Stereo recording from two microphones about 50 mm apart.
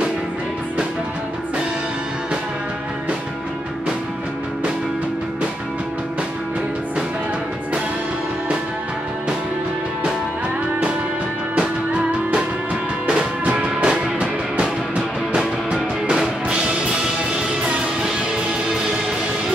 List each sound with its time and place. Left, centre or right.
11.5 s music: centre